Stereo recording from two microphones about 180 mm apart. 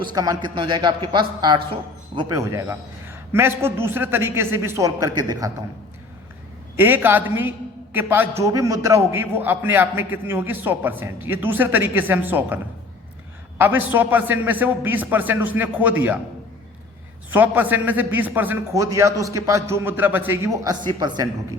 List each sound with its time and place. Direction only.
0.0 s a man's voice: 20° right (ahead or behind)
6.7 s a man's voice: 10° right (ahead or behind)
13.6 s a man's voice: 10° right (ahead or behind)
17.3 s a man's voice: 10° right (ahead or behind)